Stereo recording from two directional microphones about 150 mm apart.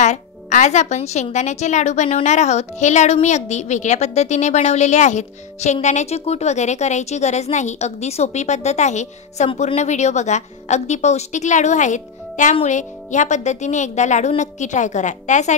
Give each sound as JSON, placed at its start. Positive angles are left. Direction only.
{"t": 0.0, "sound": "speech", "side_deg": 55}